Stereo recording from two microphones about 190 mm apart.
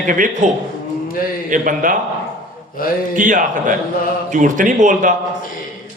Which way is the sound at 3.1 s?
45° right (ahead or behind).